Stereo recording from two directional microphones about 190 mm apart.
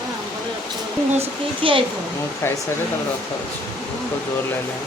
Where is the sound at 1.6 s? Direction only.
30° right (ahead or behind).